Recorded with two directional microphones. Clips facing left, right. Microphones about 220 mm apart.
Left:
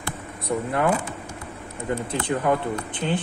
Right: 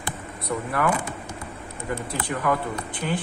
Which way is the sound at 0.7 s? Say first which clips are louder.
Left 2 dB; 25° left (ahead or behind).